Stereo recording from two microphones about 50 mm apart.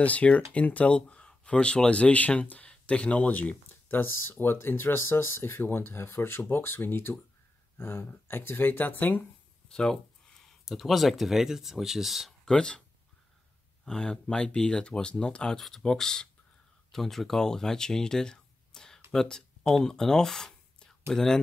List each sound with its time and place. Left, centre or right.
0.0 s speech: left
3.9 s speech: left
9.7 s speech: centre
10.6 s speech: centre
12.4 s speech: centre
13.8 s speech: centre